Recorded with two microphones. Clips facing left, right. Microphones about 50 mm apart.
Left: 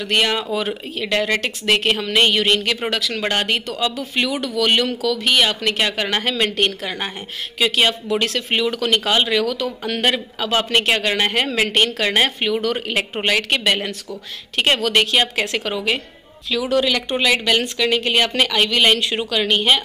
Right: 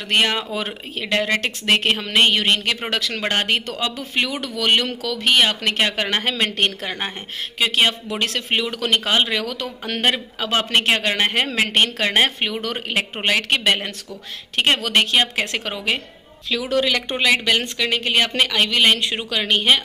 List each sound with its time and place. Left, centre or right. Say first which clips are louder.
0.1 s speech: even; right